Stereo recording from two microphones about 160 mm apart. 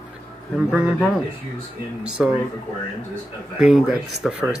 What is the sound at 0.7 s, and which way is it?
Speech, 5° right (ahead or behind).